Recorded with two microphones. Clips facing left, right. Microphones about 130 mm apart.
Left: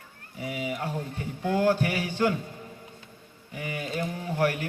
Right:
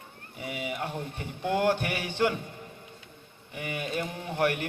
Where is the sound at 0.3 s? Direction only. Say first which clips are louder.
Left 2 dB; 25° right (ahead or behind).